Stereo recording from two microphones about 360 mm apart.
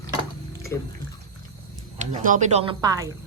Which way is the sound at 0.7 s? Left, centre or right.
Centre.